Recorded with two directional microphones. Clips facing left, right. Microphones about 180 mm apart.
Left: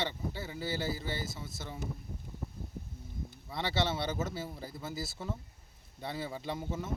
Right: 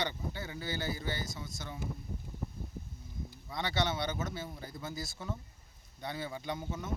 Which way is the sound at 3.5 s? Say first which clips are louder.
Left 1 dB; 25° left (ahead or behind).